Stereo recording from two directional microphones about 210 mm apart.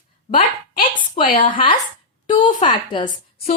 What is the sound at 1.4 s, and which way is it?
A woman's voice, 25° left (ahead or behind).